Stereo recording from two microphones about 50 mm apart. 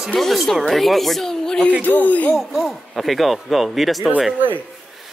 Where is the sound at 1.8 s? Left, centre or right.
Left.